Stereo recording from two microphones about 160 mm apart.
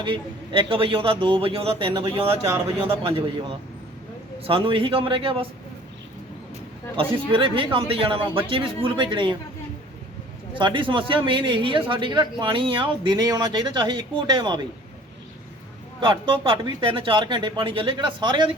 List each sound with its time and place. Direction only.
0.0 s speech: 30° right (ahead or behind)
2.2 s speech: 15° right (ahead or behind)
2.8 s speech: 35° right (ahead or behind)
4.4 s speech: 30° right (ahead or behind)
6.9 s speech: 30° right (ahead or behind)
10.5 s a man's voice: 30° right (ahead or behind)
16.0 s speech: 30° right (ahead or behind)